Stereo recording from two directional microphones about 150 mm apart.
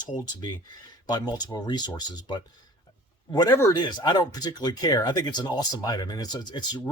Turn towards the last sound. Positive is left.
turn(degrees=30)  # may be behind; listen again after turning